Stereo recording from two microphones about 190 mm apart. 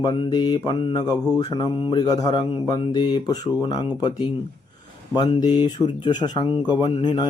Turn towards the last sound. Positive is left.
turn(degrees=25)  # may be behind; listen again after turning